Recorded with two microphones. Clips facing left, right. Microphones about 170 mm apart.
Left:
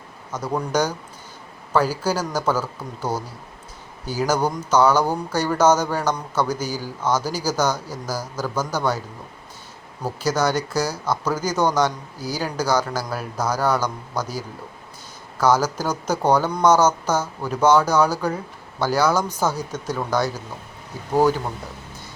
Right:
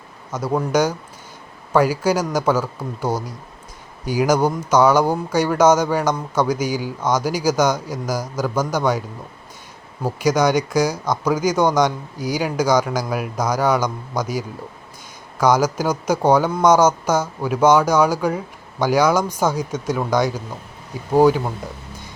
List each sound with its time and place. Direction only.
0.3 s speech: 10° right (ahead or behind)
10.0 s speech: 15° right (ahead or behind)